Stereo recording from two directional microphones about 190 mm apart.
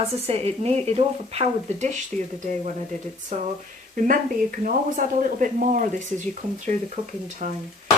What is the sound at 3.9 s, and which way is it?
Speech, 45° right (ahead or behind).